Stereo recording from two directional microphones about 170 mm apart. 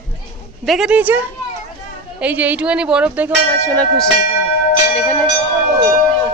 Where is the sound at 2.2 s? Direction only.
10° right (ahead or behind).